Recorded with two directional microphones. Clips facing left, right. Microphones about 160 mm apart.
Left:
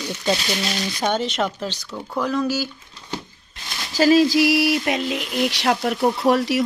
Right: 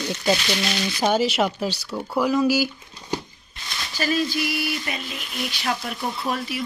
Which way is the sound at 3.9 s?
90° left.